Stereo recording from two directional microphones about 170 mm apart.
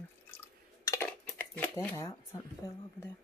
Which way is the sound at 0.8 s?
15° left (ahead or behind).